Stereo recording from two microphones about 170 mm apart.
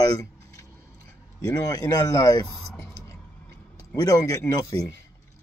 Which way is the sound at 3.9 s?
20° left (ahead or behind).